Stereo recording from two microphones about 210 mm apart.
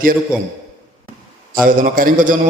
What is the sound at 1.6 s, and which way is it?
Speech, 40° right (ahead or behind).